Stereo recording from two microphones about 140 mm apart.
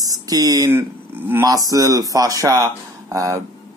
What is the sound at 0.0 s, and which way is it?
Speech, 25° right (ahead or behind).